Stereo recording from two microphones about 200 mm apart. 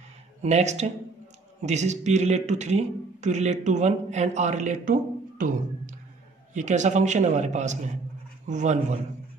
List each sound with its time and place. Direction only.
0.4 s a man's voice: 35° right (ahead or behind)